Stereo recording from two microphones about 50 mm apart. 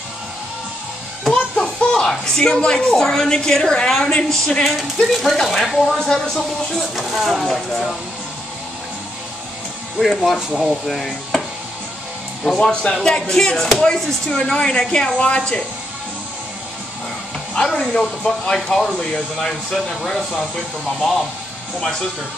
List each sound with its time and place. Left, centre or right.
1.3 s a sound: centre
2.9 s speech: centre
9.9 s speech: centre
10.9 s chopping: centre
12.4 s a woman's voice: centre
17.6 s speech: centre